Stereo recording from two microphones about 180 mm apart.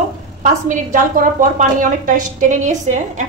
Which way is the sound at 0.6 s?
50° right (ahead or behind).